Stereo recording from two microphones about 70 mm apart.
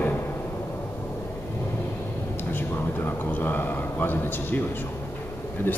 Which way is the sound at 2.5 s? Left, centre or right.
Left.